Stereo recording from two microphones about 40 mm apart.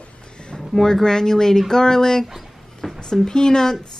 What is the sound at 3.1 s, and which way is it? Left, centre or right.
Speech, centre.